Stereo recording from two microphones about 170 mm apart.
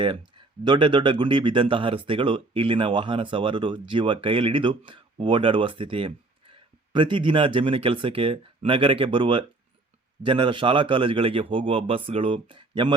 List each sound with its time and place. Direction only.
0.0 s a man's voice: 30° right (ahead or behind)